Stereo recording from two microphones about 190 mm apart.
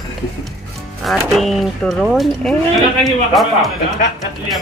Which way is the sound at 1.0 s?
Centre (ahead or behind).